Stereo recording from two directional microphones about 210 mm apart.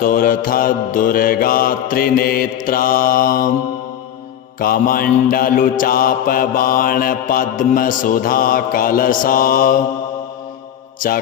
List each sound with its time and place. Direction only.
0.0 s mantra: 45° left (ahead or behind)
4.6 s mantra: 45° left (ahead or behind)